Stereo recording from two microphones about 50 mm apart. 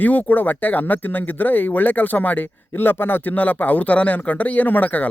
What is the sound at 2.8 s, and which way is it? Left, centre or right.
Speech, left.